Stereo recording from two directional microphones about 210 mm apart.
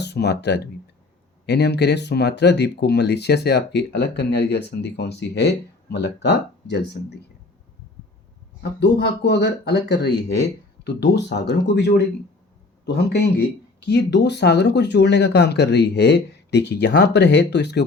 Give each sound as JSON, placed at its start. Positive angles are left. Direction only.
{"t": 0.0, "sound": "speech", "side_deg": 55}
{"t": 8.8, "sound": "speech", "side_deg": 55}